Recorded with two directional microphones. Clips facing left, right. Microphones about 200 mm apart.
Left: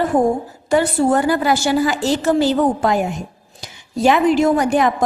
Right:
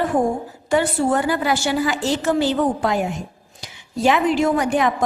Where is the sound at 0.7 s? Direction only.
40° left (ahead or behind).